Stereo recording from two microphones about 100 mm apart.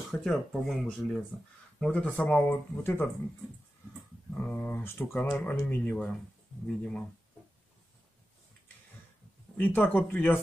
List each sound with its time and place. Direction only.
0.2 s speech: 5° left (ahead or behind); by 3.1 s 20° left (ahead or behind)
4.3 s speech: 15° left (ahead or behind)
9.6 s speech: 20° left (ahead or behind)